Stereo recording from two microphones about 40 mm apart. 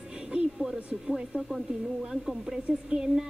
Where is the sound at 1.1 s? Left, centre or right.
Centre.